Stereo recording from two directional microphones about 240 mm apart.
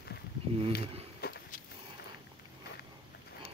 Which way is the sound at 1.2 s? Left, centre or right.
Left.